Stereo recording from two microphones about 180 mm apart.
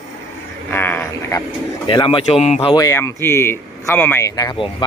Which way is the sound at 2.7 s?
15° left (ahead or behind).